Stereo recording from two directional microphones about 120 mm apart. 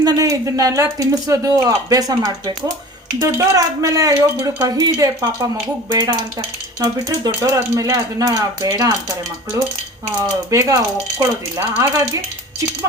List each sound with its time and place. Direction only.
0.0 s speech: 30° right (ahead or behind)
5.9 s stir: 35° right (ahead or behind)
7.4 s speech: 30° right (ahead or behind)